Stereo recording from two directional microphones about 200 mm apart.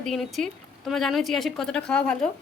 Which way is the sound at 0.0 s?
Centre (ahead or behind).